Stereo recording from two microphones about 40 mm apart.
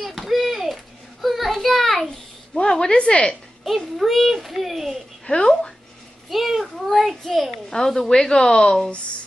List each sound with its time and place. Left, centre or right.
0.0 s a sound: centre
2.6 s speech: centre
3.6 s a child's voice: centre
5.2 s speech: left
6.3 s a child's voice: centre
7.7 s speech: centre